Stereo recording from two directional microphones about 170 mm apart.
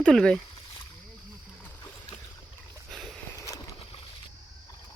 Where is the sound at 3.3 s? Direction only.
20° left (ahead or behind).